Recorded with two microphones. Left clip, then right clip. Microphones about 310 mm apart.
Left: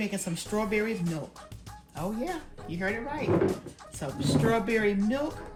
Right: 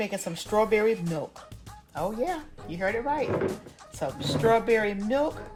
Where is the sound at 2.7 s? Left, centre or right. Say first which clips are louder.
Right 5 dB; right.